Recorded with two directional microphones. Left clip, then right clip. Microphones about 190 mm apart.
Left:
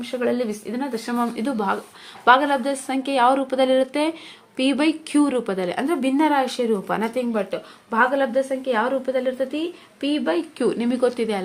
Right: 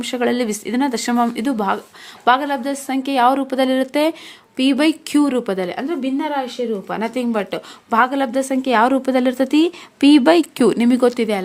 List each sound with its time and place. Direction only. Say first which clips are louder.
0.0 s a woman's voice: right 4 dB; 40° right (ahead or behind); by 5.8 s 15° right (ahead or behind)
5.9 s a woman's voice: left 5 dB; centre (ahead or behind)
7.0 s a woman's voice: right 3 dB; 25° right (ahead or behind)
7.5 s a woman's voice: right 5 dB; 40° right (ahead or behind)
10.6 s speech: right 6 dB; 35° right (ahead or behind)